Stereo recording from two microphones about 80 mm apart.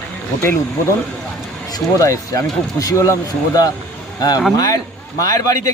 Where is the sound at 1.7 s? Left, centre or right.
Left.